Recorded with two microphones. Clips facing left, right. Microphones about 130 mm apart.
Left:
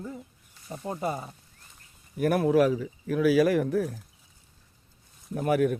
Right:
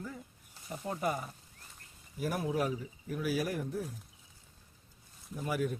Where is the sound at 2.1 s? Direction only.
65° left (ahead or behind); by 4.0 s 85° left.